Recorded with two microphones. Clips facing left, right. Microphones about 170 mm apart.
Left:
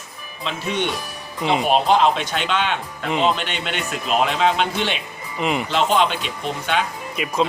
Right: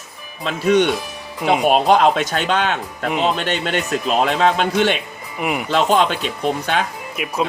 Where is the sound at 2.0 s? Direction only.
45° right (ahead or behind).